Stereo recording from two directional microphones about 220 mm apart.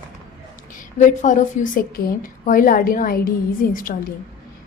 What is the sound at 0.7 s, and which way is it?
A woman's voice, 35° left (ahead or behind).